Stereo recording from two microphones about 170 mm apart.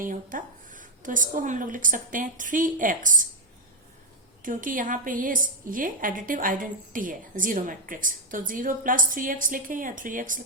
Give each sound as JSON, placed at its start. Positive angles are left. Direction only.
{"t": 0.0, "sound": "a woman's voice", "side_deg": -50}
{"t": 4.4, "sound": "a woman's voice", "side_deg": -50}